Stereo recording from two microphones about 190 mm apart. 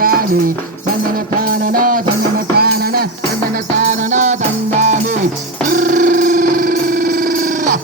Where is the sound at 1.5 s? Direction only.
50° right (ahead or behind).